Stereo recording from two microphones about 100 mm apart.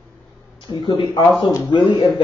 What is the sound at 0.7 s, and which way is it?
Speech, 45° left (ahead or behind).